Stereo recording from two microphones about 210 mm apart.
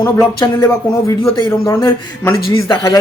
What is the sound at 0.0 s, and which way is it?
Speech, 20° left (ahead or behind).